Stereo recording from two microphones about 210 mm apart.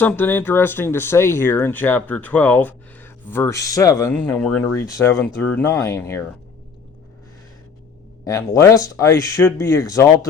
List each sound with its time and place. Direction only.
0.0 s speech: 10° left (ahead or behind)
8.2 s speech: 15° left (ahead or behind)